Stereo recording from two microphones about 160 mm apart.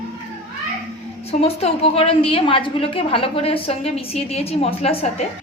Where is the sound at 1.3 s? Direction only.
40° left (ahead or behind).